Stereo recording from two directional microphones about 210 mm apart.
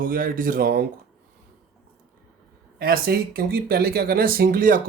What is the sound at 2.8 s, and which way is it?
Speech, 45° right (ahead or behind).